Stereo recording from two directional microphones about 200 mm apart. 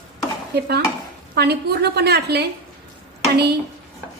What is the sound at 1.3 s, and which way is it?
A woman's voice, 55° right (ahead or behind).